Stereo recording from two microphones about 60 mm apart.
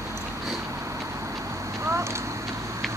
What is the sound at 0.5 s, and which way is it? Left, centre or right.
Vehicle, right.